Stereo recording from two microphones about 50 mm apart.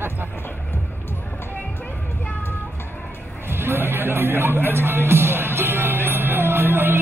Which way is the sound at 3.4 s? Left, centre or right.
Right.